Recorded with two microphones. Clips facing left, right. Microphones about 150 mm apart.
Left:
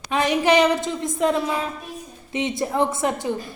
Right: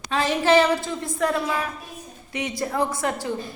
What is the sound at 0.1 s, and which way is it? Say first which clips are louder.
A woman's voice: left 1 dB; 20° left (ahead or behind).